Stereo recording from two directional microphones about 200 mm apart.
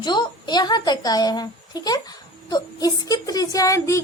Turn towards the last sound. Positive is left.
turn(degrees=15)  # may be behind; listen again after turning